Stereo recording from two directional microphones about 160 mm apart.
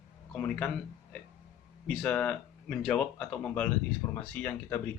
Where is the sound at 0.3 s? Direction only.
5° left (ahead or behind).